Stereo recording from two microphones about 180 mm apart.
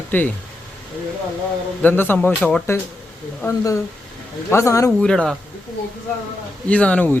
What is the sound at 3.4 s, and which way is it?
Speech, 15° left (ahead or behind).